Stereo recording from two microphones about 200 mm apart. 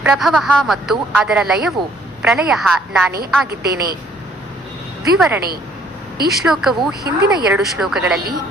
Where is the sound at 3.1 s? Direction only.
50° right (ahead or behind).